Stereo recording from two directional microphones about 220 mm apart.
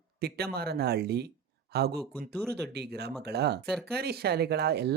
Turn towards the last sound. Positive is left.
turn(degrees=-50)  # may be behind; listen again after turning